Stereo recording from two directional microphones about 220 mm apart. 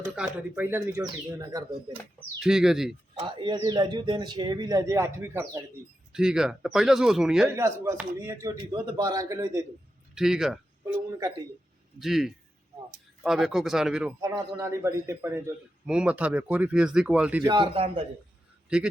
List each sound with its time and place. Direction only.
0.0 s a man's voice: 10° right (ahead or behind)
2.4 s speech: centre (ahead or behind)
3.2 s a man's voice: 25° right (ahead or behind); by 7.5 s centre (ahead or behind)
7.5 s a man's voice: 15° right (ahead or behind)
10.2 s speech: centre (ahead or behind)
11.9 s speech: centre (ahead or behind)
14.2 s a man's voice: 15° right (ahead or behind)
17.4 s a man's voice: 20° right (ahead or behind)
18.7 s speech: 5° right (ahead or behind)